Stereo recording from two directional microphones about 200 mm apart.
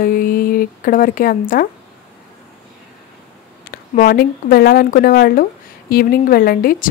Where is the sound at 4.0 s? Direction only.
45° left (ahead or behind).